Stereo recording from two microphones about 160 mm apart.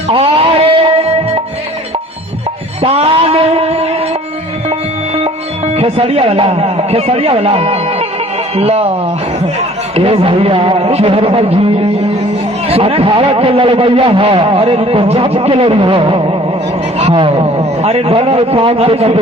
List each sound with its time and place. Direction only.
0.1 s music: 35° right (ahead or behind)
2.8 s a sound: 35° right (ahead or behind)
5.7 s a man's voice: 40° right (ahead or behind)
9.9 s a man's voice: 40° right (ahead or behind)